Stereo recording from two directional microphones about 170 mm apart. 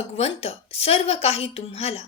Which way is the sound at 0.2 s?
35° left (ahead or behind).